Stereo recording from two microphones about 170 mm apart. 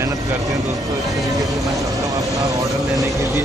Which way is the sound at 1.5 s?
Centre (ahead or behind).